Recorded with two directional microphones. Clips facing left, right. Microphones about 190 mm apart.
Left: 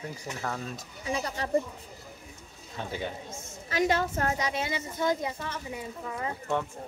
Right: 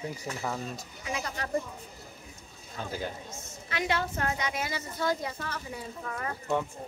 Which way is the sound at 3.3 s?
40° left (ahead or behind).